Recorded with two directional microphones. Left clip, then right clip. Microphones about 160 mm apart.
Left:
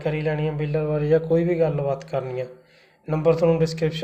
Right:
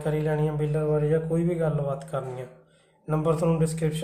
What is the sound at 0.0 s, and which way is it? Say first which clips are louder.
A man's voice: left 2 dB; 10° left (ahead or behind).